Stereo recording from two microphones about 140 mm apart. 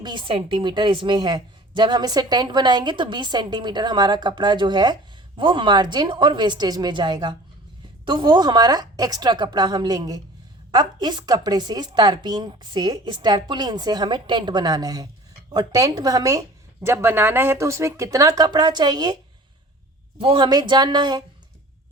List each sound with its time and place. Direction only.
0.0 s a woman's voice: 35° right (ahead or behind)
20.1 s a woman's voice: 40° right (ahead or behind)